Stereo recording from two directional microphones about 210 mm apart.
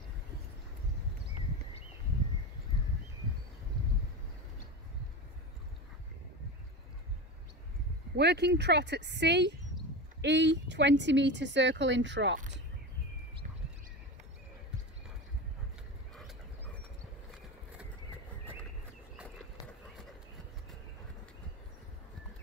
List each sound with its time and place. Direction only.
8.2 s speech: 55° right (ahead or behind)